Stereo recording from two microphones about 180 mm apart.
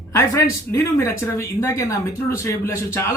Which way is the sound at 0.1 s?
15° left (ahead or behind).